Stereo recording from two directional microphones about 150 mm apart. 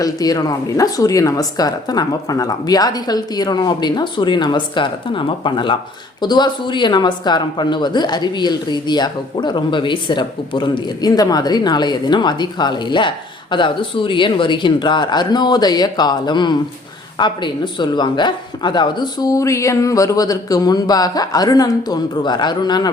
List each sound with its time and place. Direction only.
0.0 s speech: 25° left (ahead or behind)